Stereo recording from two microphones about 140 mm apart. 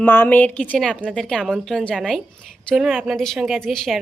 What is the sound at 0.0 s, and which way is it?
Speech, 15° left (ahead or behind).